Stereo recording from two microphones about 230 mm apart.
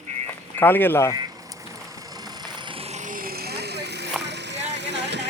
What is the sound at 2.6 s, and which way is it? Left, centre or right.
Vehicle, right.